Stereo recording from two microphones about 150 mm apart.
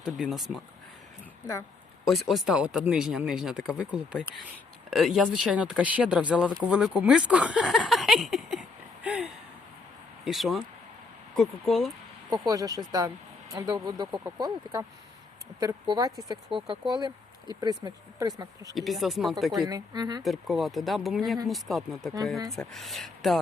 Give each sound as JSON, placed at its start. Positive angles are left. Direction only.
{"t": 0.0, "sound": "speech", "side_deg": 0}
{"t": 2.0, "sound": "speech", "side_deg": 0}
{"t": 9.0, "sound": "a sound", "side_deg": -5}
{"t": 10.2, "sound": "speech", "side_deg": 0}
{"t": 12.3, "sound": "speech", "side_deg": -25}
{"t": 18.7, "sound": "speech", "side_deg": 0}
{"t": 19.5, "sound": "speech", "side_deg": -25}
{"t": 20.2, "sound": "speech", "side_deg": 0}